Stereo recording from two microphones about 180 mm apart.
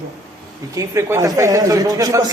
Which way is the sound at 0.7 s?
15° right (ahead or behind).